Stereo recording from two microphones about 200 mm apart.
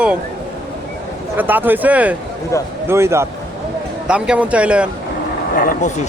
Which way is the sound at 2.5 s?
15° left (ahead or behind).